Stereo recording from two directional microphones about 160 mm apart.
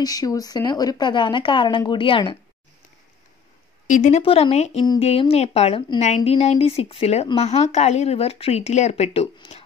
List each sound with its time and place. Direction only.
0.0 s a woman's voice: 25° left (ahead or behind)
3.8 s a woman's voice: 50° left (ahead or behind)
4.2 s speech: 35° left (ahead or behind)